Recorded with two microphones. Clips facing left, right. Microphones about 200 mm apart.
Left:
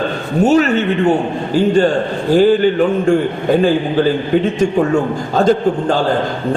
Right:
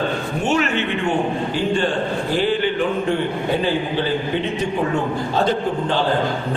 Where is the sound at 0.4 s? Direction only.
40° left (ahead or behind).